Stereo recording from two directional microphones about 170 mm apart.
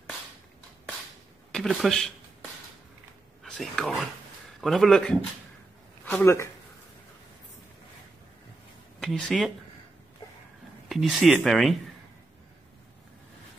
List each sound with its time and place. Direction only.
1.5 s speech: centre (ahead or behind)
3.4 s speech: centre (ahead or behind)
6.0 s speech: 15° left (ahead or behind)
9.0 s speech: centre (ahead or behind)
10.9 s speech: centre (ahead or behind)